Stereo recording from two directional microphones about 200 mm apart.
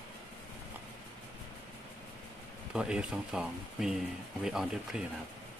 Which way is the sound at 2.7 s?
5° right (ahead or behind).